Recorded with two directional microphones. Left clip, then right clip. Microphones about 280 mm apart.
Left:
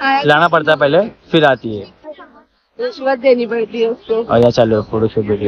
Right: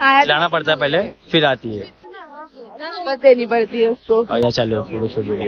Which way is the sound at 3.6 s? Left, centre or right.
Right.